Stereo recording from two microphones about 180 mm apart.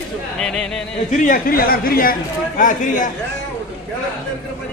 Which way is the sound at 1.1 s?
45° left (ahead or behind).